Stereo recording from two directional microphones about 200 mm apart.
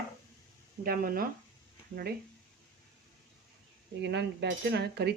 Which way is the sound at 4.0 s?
60° right (ahead or behind).